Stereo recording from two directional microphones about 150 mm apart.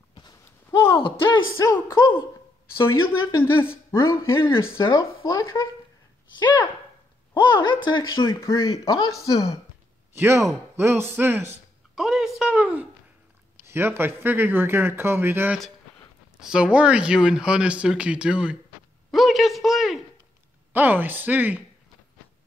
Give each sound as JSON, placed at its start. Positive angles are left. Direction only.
{"t": 0.1, "sound": "a sound", "side_deg": 25}
{"t": 0.7, "sound": "a sound", "side_deg": 15}
{"t": 1.6, "sound": "a woman's voice", "side_deg": 20}
{"t": 8.2, "sound": "speech", "side_deg": 20}
{"t": 10.1, "sound": "speech", "side_deg": -15}
{"t": 11.9, "sound": "a woman's voice", "side_deg": -5}
{"t": 20.7, "sound": "speech", "side_deg": -10}